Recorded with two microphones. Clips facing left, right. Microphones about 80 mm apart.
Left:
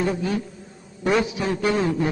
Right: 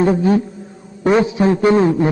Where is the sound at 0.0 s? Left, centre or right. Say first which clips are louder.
Right 10 dB; right.